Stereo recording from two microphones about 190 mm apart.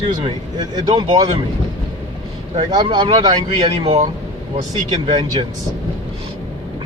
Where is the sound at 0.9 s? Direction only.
30° right (ahead or behind).